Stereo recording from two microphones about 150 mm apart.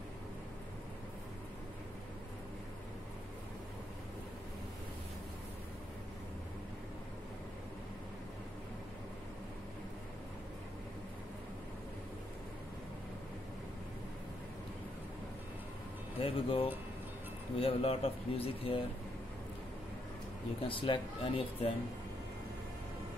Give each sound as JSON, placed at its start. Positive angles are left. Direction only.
{"t": 16.2, "sound": "speech", "side_deg": 35}
{"t": 20.6, "sound": "speech", "side_deg": 35}